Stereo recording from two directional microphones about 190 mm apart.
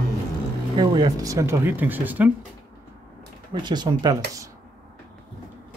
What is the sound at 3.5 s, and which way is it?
Speech, 25° right (ahead or behind).